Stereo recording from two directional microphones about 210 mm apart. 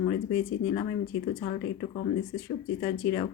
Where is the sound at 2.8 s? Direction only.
20° left (ahead or behind).